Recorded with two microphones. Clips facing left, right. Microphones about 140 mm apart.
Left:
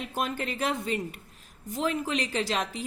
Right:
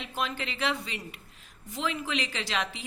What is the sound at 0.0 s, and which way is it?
A woman's voice, 45° left (ahead or behind).